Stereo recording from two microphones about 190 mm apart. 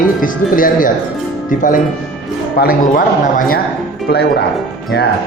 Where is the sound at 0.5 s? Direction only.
45° left (ahead or behind).